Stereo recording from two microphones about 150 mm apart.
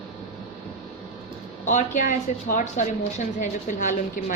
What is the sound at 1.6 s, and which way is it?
A woman's voice, 55° left (ahead or behind).